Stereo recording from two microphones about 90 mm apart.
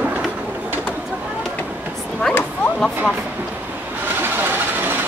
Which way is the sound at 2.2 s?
15° left (ahead or behind).